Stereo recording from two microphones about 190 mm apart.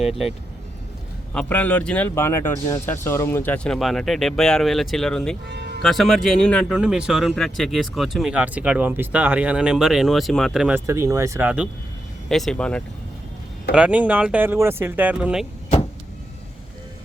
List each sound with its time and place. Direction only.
0.0 s speech: centre (ahead or behind)
5.5 s music: 65° right (ahead or behind)
5.8 s speech: centre (ahead or behind)
10.8 s speech: 15° right (ahead or behind); by 12.8 s 5° left (ahead or behind)
13.7 s speech: 5° right (ahead or behind)